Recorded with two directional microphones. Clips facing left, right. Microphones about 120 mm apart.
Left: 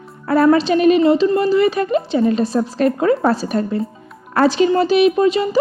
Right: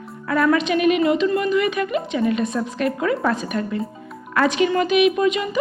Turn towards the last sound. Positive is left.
turn(degrees=35)  # may be behind; listen again after turning